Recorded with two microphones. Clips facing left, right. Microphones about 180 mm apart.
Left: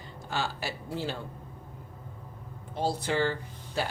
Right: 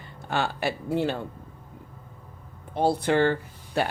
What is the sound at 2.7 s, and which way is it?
Speech, 60° right (ahead or behind).